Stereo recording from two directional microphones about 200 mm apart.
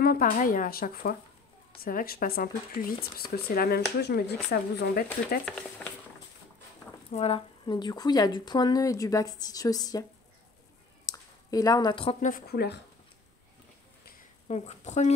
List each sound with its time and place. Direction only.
0.0 s speech: 45° left (ahead or behind)
7.1 s speech: 30° left (ahead or behind)
11.1 s speech: 20° left (ahead or behind); by 12.7 s 50° left (ahead or behind)
14.5 s a woman's voice: 35° left (ahead or behind)